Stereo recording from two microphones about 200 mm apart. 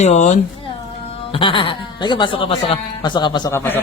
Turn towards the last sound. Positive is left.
turn(degrees=10)  # may be behind; listen again after turning